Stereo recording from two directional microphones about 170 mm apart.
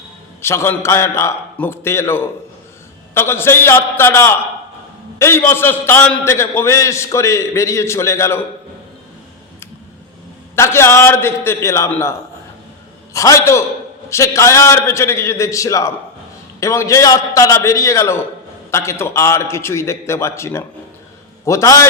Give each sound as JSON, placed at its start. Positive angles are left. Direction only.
{"t": 0.4, "sound": "a man's voice", "side_deg": 15}
{"t": 10.5, "sound": "a man's voice", "side_deg": 15}
{"t": 13.1, "sound": "a man's voice", "side_deg": 20}